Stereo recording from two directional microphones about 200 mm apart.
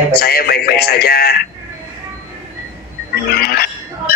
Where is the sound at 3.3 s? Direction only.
50° left (ahead or behind).